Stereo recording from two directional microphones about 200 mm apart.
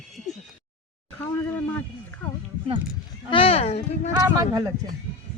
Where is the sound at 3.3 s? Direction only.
30° left (ahead or behind).